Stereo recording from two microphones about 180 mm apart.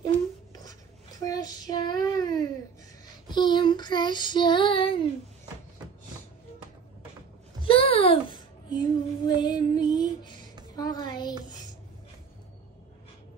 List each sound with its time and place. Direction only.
1.2 s child singing: 20° left (ahead or behind)
7.6 s child singing: 30° left (ahead or behind)
10.8 s a sound: 20° left (ahead or behind)